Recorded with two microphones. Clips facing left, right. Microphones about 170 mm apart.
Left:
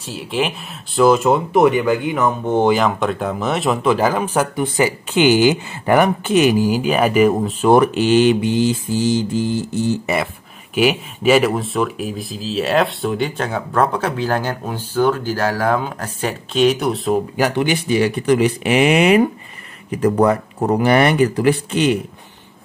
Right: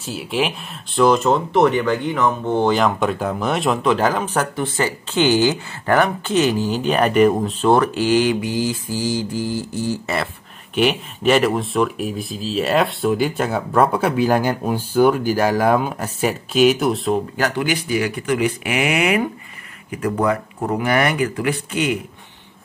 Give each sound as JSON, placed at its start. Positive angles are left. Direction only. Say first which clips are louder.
{"t": 0.0, "sound": "speech", "louder": "even", "side_deg": 0}
{"t": 2.8, "sound": "speech", "louder": "even", "side_deg": 0}
{"t": 7.7, "sound": "mantra", "louder": "left 4 dB", "side_deg": 20}
{"t": 17.4, "sound": "speech", "louder": "left 3 dB", "side_deg": 20}